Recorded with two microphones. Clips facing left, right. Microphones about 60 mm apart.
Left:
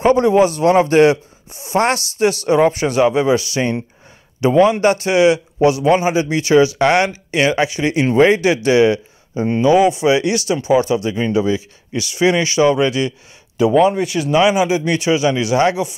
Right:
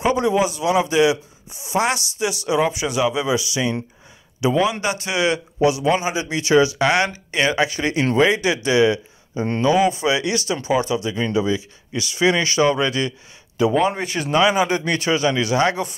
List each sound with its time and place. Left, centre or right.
0.0 s speech: left
13.8 s speech: right
14.3 s speech: centre